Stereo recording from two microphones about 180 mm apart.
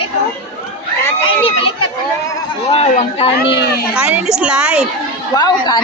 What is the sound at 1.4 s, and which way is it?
Speech, 30° left (ahead or behind).